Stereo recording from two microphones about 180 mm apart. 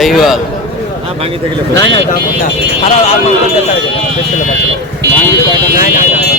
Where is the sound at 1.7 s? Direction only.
25° left (ahead or behind).